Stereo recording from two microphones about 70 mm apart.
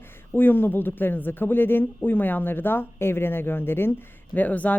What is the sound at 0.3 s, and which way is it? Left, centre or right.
A woman's voice, left.